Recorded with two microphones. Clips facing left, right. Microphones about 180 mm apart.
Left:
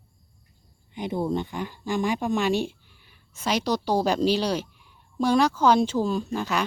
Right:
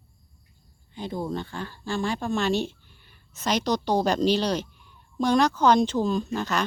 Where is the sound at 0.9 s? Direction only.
15° left (ahead or behind).